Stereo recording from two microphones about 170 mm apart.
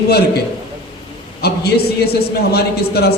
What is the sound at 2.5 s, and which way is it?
Speech, 70° left (ahead or behind).